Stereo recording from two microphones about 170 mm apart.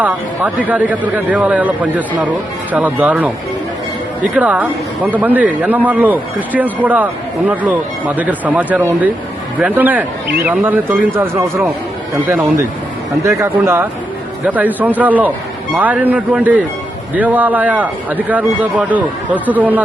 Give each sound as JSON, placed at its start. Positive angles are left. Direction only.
{"t": 0.0, "sound": "speech", "side_deg": -10}